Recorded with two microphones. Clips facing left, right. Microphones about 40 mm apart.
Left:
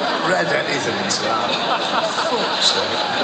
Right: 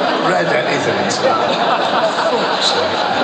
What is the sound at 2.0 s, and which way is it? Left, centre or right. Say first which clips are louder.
Speech: right 5 dB; right.